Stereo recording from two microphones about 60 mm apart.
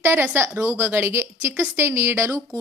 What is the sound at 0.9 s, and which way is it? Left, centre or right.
Speech, right.